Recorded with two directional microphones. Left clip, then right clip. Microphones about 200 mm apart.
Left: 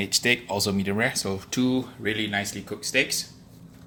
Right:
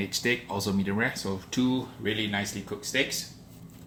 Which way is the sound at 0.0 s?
40° left (ahead or behind).